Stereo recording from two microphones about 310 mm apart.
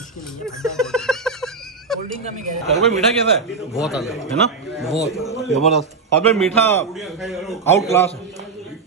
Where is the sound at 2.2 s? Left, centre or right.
Right.